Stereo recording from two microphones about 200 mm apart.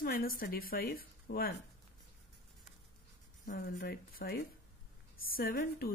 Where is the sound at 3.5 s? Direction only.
50° left (ahead or behind).